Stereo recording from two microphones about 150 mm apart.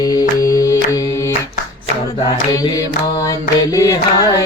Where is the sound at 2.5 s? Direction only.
25° left (ahead or behind).